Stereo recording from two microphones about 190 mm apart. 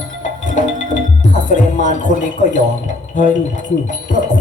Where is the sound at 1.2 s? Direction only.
40° left (ahead or behind).